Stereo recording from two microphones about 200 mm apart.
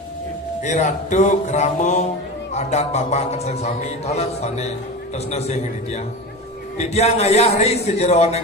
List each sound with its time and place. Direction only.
0.6 s a man's voice: 35° left (ahead or behind)